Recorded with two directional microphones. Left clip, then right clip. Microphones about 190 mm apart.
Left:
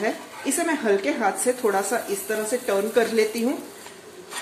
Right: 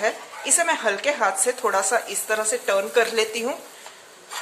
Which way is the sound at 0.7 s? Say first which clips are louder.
Left 3 dB; 20° right (ahead or behind).